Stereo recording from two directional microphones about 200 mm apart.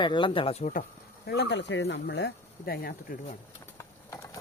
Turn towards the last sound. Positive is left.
turn(degrees=15)  # may be behind; listen again after turning